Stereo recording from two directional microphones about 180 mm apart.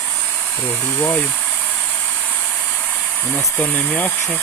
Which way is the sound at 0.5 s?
10° left (ahead or behind).